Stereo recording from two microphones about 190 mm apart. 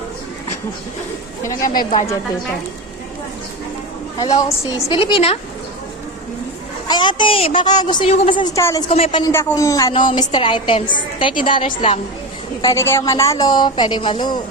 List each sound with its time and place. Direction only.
1.6 s speech: 45° left (ahead or behind)
4.6 s a woman's voice: 25° left (ahead or behind)
6.8 s a woman's voice: 25° left (ahead or behind)
8.9 s a woman's voice: 30° left (ahead or behind)
9.2 s a man's voice: 15° left (ahead or behind)
12.6 s a man's voice: 15° left (ahead or behind)